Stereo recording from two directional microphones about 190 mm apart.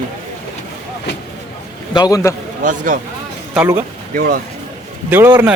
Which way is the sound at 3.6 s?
15° right (ahead or behind).